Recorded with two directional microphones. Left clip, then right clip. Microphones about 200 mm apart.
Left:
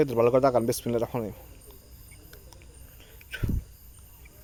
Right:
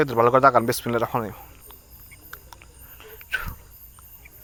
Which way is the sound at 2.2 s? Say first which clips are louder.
Right 11 dB; 10° left (ahead or behind).